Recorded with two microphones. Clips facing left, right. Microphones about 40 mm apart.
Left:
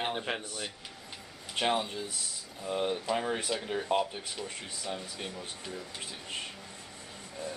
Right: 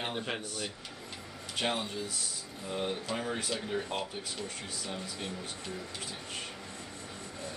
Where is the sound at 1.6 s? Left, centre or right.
Centre.